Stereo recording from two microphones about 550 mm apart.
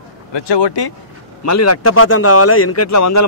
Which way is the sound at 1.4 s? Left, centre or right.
Left.